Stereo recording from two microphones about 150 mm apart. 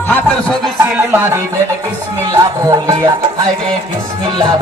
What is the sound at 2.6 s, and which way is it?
Speech, 25° right (ahead or behind).